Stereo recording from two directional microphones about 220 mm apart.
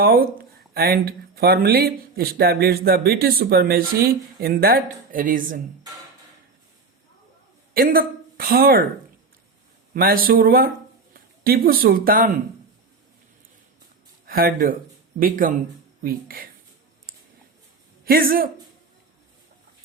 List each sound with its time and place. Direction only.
0.0 s speech: 40° right (ahead or behind)
7.7 s speech: 40° right (ahead or behind)
9.9 s a man's voice: 40° right (ahead or behind)
14.3 s speech: 40° right (ahead or behind)
18.0 s a man's voice: 40° right (ahead or behind)